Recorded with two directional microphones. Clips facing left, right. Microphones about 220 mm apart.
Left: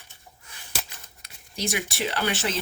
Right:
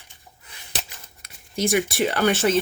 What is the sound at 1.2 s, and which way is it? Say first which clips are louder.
Speech: right 7 dB; 50° right (ahead or behind).